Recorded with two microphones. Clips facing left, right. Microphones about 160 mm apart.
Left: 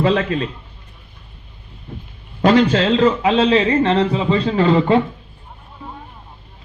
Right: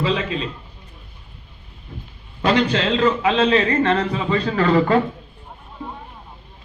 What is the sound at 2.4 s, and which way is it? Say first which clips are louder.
A man's voice: left 5 dB; 45° left (ahead or behind).